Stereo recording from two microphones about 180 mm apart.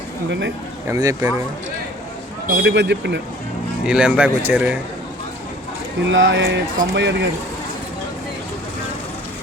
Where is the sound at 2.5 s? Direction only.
75° right (ahead or behind).